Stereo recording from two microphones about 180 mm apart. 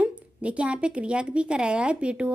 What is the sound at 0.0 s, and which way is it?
A woman's voice, 5° right (ahead or behind).